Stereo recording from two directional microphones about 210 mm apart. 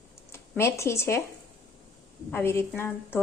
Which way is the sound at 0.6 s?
10° left (ahead or behind).